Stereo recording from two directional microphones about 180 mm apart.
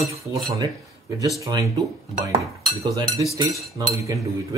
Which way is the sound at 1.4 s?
20° right (ahead or behind).